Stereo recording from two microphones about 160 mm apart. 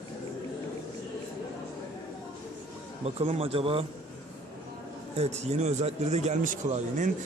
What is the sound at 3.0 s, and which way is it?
Speech, 35° right (ahead or behind).